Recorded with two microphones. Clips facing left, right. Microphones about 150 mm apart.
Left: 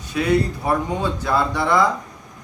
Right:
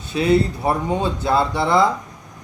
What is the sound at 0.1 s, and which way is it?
Speech, 25° right (ahead or behind).